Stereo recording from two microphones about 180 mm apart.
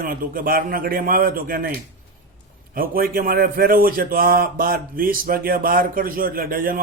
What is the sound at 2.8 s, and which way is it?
Speech, 55° right (ahead or behind).